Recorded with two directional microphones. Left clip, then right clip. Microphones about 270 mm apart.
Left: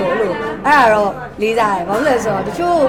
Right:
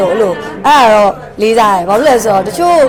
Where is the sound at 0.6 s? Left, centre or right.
Right.